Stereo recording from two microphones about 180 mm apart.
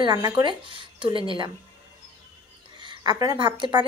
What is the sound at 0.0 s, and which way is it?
A woman's voice, 25° right (ahead or behind).